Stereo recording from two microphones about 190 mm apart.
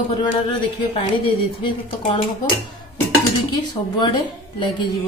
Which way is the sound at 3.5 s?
20° left (ahead or behind).